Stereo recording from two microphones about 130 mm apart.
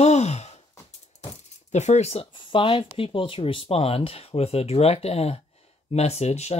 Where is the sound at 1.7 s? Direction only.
60° left (ahead or behind).